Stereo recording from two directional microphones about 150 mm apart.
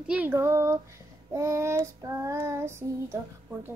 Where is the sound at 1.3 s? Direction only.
20° right (ahead or behind).